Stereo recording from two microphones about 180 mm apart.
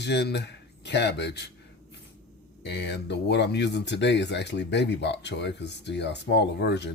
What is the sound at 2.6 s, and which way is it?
Speech, 70° left (ahead or behind).